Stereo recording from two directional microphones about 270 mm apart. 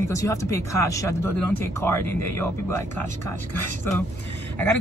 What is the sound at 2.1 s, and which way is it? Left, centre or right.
Speech, right.